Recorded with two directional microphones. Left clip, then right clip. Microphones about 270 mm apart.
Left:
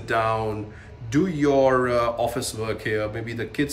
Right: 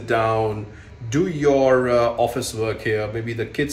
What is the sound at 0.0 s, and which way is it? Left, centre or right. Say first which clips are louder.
Speech: right 3 dB; centre.